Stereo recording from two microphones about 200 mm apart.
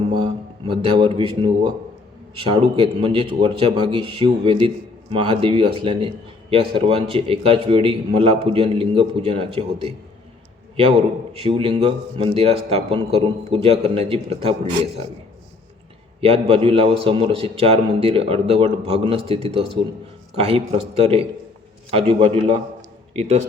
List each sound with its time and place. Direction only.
0.1 s speech: 25° right (ahead or behind)
11.3 s speech: 25° right (ahead or behind)
16.2 s a man's voice: 30° right (ahead or behind)